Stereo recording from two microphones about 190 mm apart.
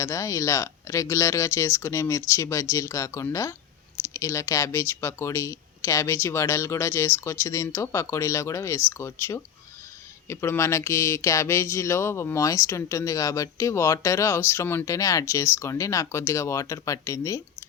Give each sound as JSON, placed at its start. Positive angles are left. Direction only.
{"t": 0.0, "sound": "speech", "side_deg": 15}